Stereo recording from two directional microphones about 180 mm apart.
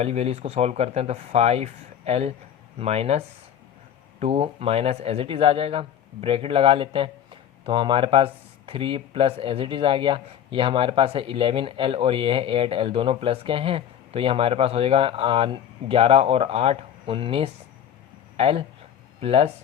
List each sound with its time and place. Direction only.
0.0 s speech: 35° right (ahead or behind)